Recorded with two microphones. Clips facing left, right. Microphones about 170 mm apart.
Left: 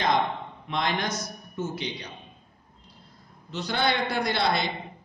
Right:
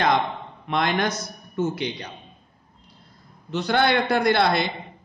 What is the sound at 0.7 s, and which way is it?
Speech, 60° right (ahead or behind).